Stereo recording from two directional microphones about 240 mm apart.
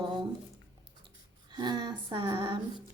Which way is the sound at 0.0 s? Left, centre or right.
Right.